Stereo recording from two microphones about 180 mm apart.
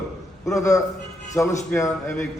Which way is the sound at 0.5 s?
20° left (ahead or behind).